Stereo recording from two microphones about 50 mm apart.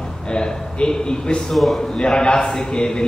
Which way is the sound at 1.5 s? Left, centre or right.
Centre.